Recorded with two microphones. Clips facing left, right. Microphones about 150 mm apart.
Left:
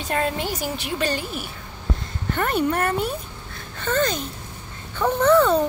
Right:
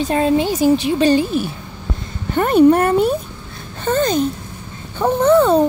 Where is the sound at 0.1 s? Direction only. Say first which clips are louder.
Right 7 dB; 25° right (ahead or behind).